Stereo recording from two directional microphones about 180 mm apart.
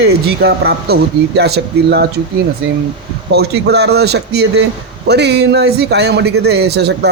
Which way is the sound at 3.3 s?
65° right (ahead or behind).